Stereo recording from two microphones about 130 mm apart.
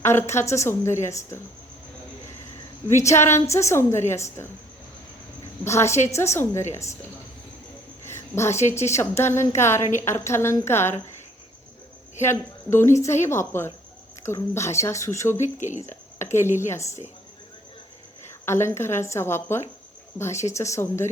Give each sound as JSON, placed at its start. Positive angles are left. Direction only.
{"t": 0.0, "sound": "a woman's voice", "side_deg": 20}
{"t": 2.9, "sound": "a woman's voice", "side_deg": 20}
{"t": 5.6, "sound": "a woman's voice", "side_deg": 20}
{"t": 8.0, "sound": "a woman's voice", "side_deg": 20}
{"t": 12.2, "sound": "a woman's voice", "side_deg": 20}
{"t": 15.5, "sound": "speech", "side_deg": 65}
{"t": 15.8, "sound": "a woman's voice", "side_deg": 20}
{"t": 18.3, "sound": "a woman's voice", "side_deg": 20}